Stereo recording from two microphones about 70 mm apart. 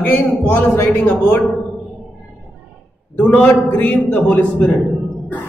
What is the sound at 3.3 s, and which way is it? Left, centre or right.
A man's voice, left.